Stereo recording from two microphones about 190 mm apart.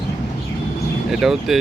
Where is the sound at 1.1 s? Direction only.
Centre (ahead or behind).